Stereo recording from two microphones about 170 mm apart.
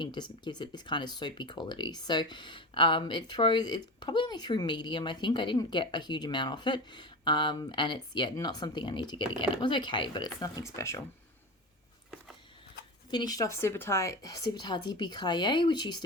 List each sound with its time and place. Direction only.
0.0 s speech: 25° left (ahead or behind)
13.1 s speech: 25° left (ahead or behind)